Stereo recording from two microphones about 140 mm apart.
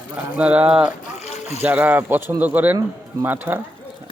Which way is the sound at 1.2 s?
50° left (ahead or behind).